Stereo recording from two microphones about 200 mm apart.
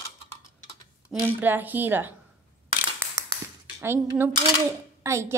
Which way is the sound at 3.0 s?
15° right (ahead or behind).